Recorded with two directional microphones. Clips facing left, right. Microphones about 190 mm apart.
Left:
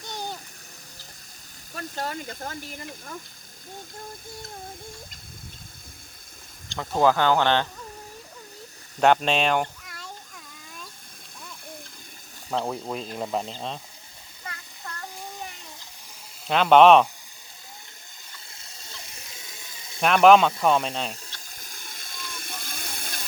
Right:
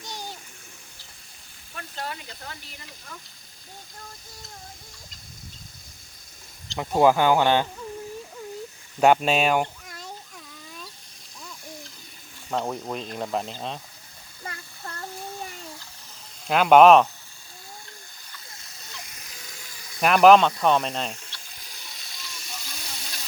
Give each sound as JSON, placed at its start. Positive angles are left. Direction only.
{"t": 0.1, "sound": "a sound", "side_deg": 55}
{"t": 1.7, "sound": "speech", "side_deg": 40}
{"t": 6.7, "sound": "speech", "side_deg": -15}
{"t": 9.0, "sound": "speech", "side_deg": -5}
{"t": 12.5, "sound": "speech", "side_deg": 0}
{"t": 16.5, "sound": "speech", "side_deg": -5}
{"t": 18.3, "sound": "a sound", "side_deg": 30}
{"t": 20.0, "sound": "speech", "side_deg": -5}
{"t": 21.1, "sound": "a sound", "side_deg": 40}